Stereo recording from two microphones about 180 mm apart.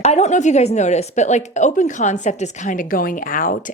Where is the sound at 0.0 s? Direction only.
40° left (ahead or behind).